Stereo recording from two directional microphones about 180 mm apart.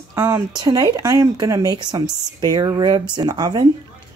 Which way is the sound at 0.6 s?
20° right (ahead or behind).